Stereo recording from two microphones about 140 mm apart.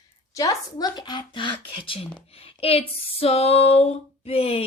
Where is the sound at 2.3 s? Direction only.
45° left (ahead or behind).